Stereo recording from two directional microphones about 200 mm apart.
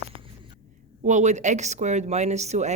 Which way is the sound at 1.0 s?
35° right (ahead or behind).